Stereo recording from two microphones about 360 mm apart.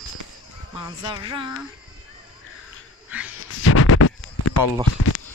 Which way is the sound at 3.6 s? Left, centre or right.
Left.